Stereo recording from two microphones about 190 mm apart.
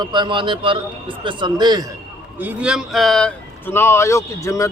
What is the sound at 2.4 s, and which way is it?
Speech, 5° right (ahead or behind).